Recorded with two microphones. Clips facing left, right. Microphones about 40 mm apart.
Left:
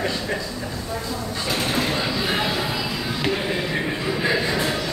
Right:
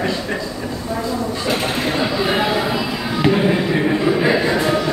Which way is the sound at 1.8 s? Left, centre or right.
Centre.